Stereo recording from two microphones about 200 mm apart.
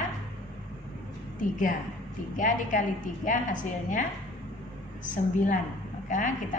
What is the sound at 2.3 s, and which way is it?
A woman's voice, 40° left (ahead or behind).